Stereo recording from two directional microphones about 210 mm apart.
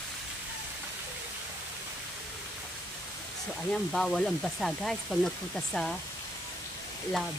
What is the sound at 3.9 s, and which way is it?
Speech, centre (ahead or behind).